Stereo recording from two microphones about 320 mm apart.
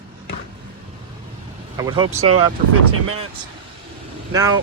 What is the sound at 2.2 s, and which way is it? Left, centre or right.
Speech, right.